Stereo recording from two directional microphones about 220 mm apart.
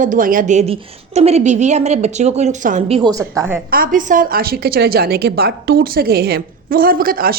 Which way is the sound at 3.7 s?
40° right (ahead or behind).